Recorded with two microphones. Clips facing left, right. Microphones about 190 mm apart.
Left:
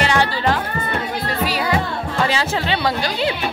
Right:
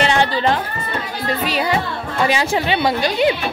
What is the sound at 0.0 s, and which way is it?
Music, 25° right (ahead or behind).